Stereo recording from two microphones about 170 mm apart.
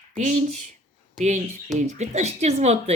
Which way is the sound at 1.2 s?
45° right (ahead or behind).